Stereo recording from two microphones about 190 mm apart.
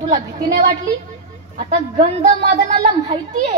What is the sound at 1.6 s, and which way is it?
A woman's voice, 40° right (ahead or behind).